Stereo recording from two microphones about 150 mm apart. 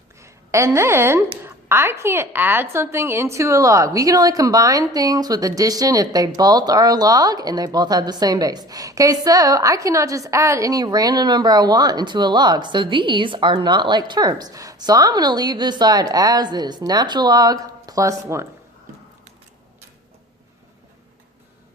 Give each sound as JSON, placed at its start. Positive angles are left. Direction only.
{"t": 0.2, "sound": "a woman's voice", "side_deg": -20}